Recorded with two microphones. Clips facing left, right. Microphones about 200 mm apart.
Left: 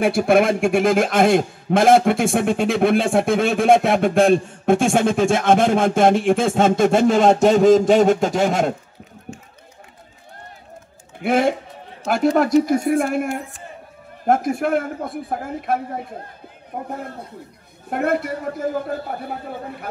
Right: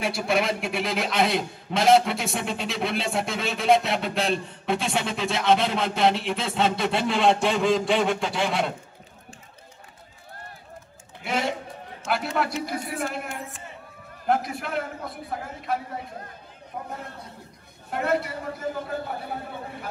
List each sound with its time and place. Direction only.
0.0 s a man's voice: 55° left (ahead or behind)
11.2 s a man's voice: 55° left (ahead or behind)
12.0 s a man's voice: 40° left (ahead or behind)